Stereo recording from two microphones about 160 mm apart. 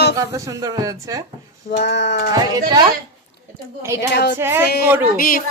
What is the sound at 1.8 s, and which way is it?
Speech, 90° left.